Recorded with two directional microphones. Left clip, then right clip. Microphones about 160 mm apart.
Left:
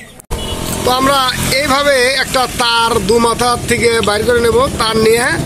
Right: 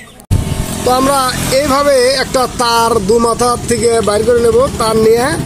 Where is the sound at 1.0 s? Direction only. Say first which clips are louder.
Even; 10° right (ahead or behind).